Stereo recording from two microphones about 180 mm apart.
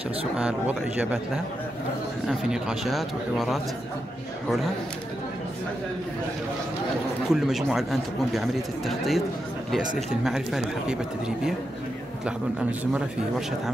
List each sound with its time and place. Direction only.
0.4 s a man's voice: 5° right (ahead or behind)
7.2 s speech: centre (ahead or behind)